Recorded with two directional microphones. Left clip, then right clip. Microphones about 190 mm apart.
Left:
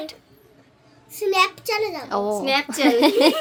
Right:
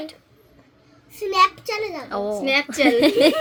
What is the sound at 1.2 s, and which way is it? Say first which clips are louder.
A child's voice: right 2 dB; 15° left (ahead or behind).